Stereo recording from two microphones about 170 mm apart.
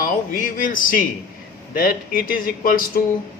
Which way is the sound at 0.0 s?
50° left (ahead or behind).